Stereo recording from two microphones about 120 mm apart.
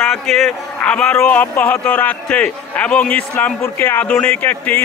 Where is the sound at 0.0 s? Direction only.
5° left (ahead or behind).